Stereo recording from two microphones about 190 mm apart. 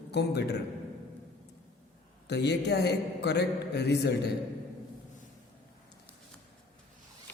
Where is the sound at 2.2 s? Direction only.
60° left (ahead or behind).